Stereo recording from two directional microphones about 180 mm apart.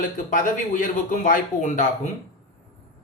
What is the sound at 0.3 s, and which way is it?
Speech, 45° left (ahead or behind).